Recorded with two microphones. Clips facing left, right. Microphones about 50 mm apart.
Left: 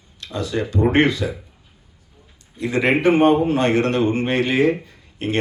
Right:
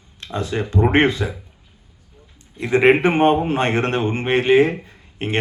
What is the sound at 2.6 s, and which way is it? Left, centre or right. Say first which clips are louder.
Speech: right 4 dB; right.